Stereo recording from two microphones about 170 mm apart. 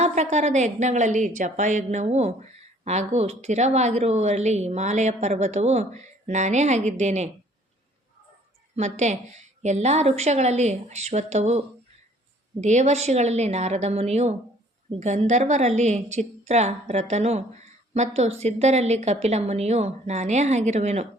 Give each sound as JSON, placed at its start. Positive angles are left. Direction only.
{"t": 0.0, "sound": "a woman's voice", "side_deg": -45}
{"t": 8.7, "sound": "a woman's voice", "side_deg": -40}